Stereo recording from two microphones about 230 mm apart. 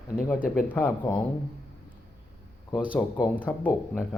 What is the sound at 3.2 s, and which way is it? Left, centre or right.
Speech, centre.